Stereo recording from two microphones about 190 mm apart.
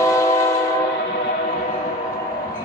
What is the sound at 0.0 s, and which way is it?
Train, 15° left (ahead or behind).